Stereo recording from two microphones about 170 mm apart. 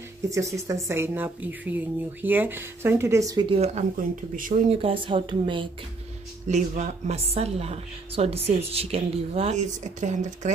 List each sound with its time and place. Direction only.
0.3 s speech: 20° right (ahead or behind)
3.4 s a woman's voice: 40° right (ahead or behind)
3.9 s speech: 50° right (ahead or behind)
4.6 s a woman's voice: 30° right (ahead or behind)
6.5 s a woman's voice: 45° right (ahead or behind)